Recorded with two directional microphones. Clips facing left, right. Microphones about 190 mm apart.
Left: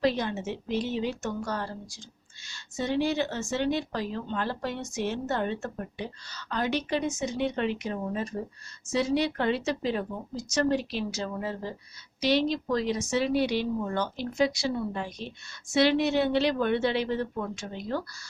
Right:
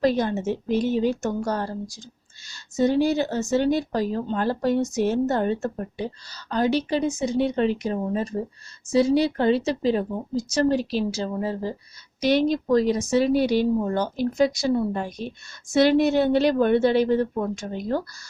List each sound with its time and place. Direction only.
0.0 s a woman's voice: 45° right (ahead or behind)
12.2 s a woman's voice: 50° right (ahead or behind)